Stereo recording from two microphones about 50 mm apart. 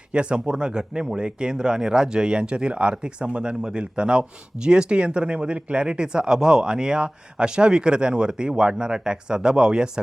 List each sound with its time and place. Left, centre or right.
0.1 s speech: right